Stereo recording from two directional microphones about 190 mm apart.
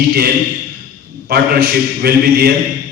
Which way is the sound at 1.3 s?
55° right (ahead or behind).